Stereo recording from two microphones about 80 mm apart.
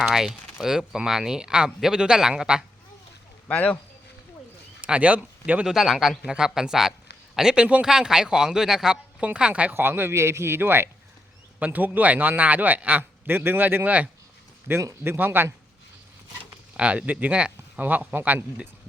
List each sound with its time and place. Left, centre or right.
0.0 s speech: centre
3.5 s speech: centre
4.8 s speech: centre
5.6 s speech: centre
9.2 s speech: centre
9.7 s a man's voice: right
14.7 s a man's voice: right
16.7 s a man's voice: centre